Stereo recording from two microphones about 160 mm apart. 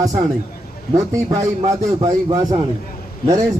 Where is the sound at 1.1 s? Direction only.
20° right (ahead or behind).